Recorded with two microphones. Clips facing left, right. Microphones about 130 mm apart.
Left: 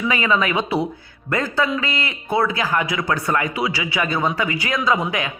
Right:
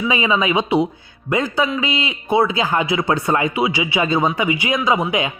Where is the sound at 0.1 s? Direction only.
20° right (ahead or behind).